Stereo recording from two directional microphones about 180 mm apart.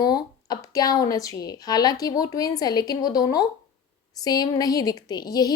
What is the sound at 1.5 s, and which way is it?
A woman's voice, 20° left (ahead or behind).